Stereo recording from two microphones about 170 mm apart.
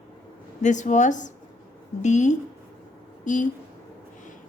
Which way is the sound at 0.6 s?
45° left (ahead or behind).